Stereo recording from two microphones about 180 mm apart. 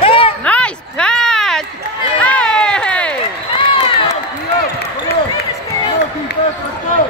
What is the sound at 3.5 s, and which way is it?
Run, 30° left (ahead or behind).